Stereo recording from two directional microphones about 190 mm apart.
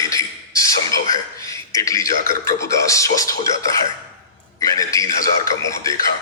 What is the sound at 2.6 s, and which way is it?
Speech, 15° left (ahead or behind).